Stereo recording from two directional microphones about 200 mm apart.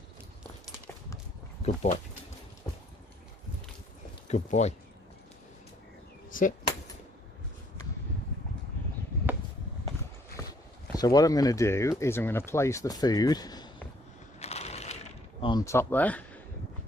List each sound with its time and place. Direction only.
1.6 s speech: 35° left (ahead or behind)
4.3 s speech: 35° left (ahead or behind)
6.3 s speech: 45° left (ahead or behind)
10.9 s speech: 20° left (ahead or behind)
14.3 s a sound: 30° left (ahead or behind)
15.4 s speech: 20° left (ahead or behind)